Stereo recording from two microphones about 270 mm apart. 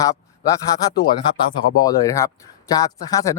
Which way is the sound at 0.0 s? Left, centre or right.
Centre.